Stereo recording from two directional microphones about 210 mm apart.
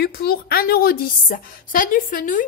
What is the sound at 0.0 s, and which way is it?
A woman's voice, 50° left (ahead or behind).